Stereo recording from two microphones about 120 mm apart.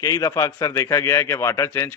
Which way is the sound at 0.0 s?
30° left (ahead or behind).